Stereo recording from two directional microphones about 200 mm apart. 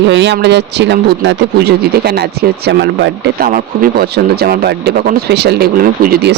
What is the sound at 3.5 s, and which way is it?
Speech, 45° right (ahead or behind).